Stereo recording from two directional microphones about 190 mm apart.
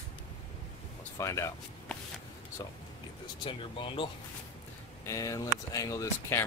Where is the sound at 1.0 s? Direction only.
15° left (ahead or behind).